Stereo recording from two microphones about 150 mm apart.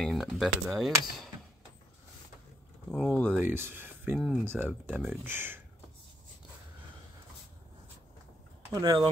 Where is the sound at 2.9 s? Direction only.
5° left (ahead or behind).